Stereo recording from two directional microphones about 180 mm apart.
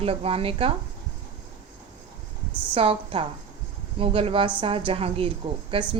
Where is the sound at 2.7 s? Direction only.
30° right (ahead or behind).